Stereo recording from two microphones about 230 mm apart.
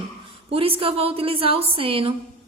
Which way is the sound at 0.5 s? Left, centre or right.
Right.